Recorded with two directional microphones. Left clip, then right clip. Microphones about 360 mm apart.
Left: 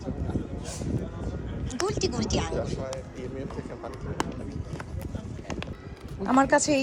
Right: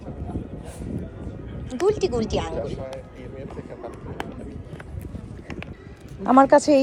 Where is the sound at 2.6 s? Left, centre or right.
Left.